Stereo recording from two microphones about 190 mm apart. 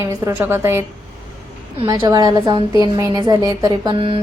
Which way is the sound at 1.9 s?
20° right (ahead or behind).